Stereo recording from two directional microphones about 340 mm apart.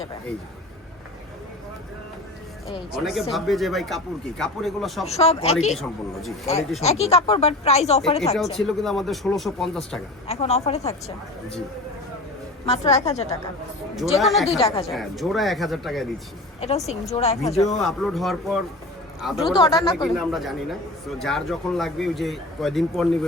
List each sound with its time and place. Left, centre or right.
2.9 s a man's voice: centre
5.0 s speech: centre
5.7 s a man's voice: centre
6.7 s speech: centre
8.5 s a man's voice: centre
10.2 s speech: centre
12.6 s speech: centre
14.2 s a man's voice: centre
16.6 s a man's voice: centre
19.5 s speech: centre
20.1 s a man's voice: centre